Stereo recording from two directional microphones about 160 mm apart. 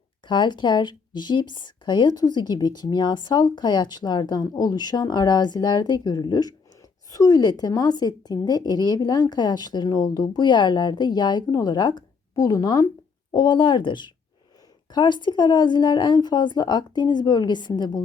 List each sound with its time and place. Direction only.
0.3 s speech: 30° left (ahead or behind)